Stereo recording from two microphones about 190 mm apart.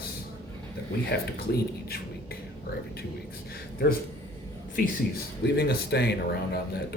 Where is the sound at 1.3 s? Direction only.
55° left (ahead or behind).